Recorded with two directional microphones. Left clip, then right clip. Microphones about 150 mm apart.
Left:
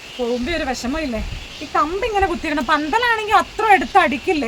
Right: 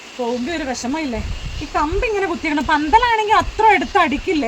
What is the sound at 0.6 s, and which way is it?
Speech, 20° left (ahead or behind).